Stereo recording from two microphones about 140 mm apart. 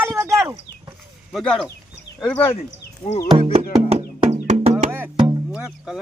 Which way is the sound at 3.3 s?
45° right (ahead or behind).